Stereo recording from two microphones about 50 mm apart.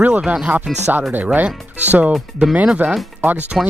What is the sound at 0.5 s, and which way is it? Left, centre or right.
Speech, right.